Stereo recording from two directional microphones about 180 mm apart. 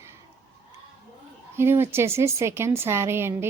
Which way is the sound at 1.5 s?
15° right (ahead or behind).